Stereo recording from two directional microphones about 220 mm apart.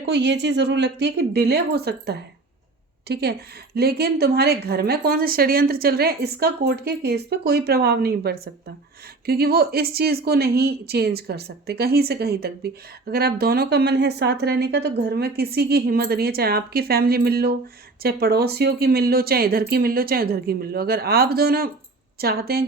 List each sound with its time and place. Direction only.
0.0 s a woman's voice: 50° right (ahead or behind)